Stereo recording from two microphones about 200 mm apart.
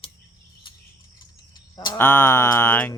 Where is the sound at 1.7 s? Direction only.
15° left (ahead or behind).